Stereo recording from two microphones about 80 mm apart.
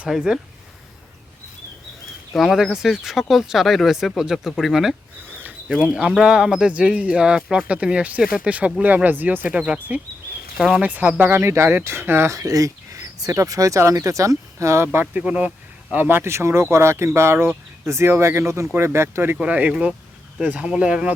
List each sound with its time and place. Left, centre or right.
0.0 s speech: centre
2.3 s speech: centre
5.3 s a sound: right
5.6 s speech: centre
10.6 s speech: centre
10.8 s speech: right
12.4 s speech: right
15.2 s speech: centre
19.4 s speech: centre